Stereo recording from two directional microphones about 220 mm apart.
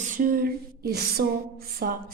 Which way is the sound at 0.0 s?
35° right (ahead or behind).